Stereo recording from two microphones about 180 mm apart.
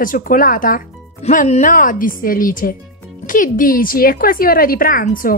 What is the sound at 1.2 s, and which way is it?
A woman's voice, 40° left (ahead or behind).